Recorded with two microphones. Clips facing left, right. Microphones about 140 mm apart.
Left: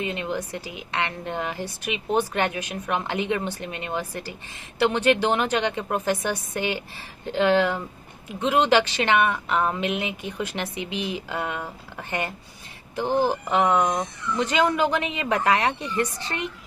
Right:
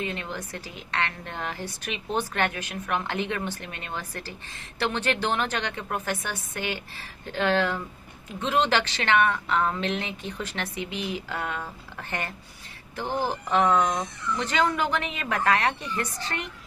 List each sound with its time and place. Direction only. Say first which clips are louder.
0.0 s a woman's voice: left 4 dB; 15° left (ahead or behind)